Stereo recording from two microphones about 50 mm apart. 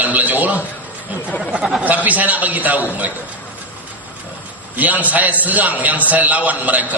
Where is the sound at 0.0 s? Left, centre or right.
Right.